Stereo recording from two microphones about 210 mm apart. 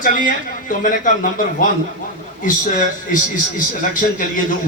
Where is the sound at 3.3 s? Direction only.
40° left (ahead or behind).